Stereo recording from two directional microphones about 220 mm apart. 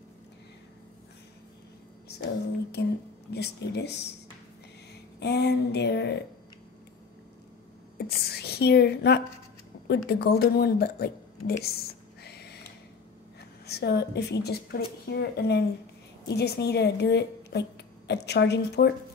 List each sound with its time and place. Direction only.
2.7 s a woman's voice: 50° left (ahead or behind)
5.2 s a woman's voice: 50° left (ahead or behind)
8.0 s a woman's voice: 45° left (ahead or behind)
12.2 s a sound: 50° left (ahead or behind)
13.4 s a woman's voice: 50° left (ahead or behind)